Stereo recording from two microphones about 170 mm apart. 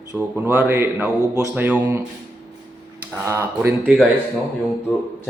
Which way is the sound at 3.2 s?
15° right (ahead or behind).